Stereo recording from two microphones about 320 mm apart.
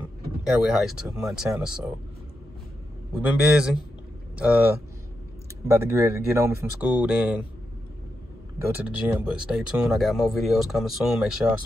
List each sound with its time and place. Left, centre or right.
0.4 s speech: centre
3.2 s speech: centre
8.5 s speech: centre